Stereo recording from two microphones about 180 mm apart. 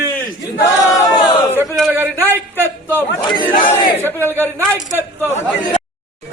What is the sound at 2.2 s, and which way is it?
Speech, 10° left (ahead or behind).